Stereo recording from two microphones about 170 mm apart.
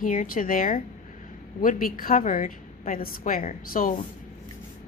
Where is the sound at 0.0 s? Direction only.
50° left (ahead or behind).